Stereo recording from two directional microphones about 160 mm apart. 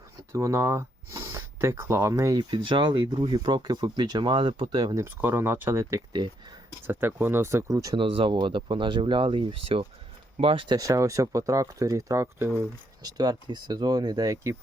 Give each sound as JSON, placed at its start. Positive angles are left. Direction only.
{"t": 0.3, "sound": "speech", "side_deg": -20}
{"t": 4.9, "sound": "speech", "side_deg": -15}
{"t": 8.0, "sound": "speech", "side_deg": -35}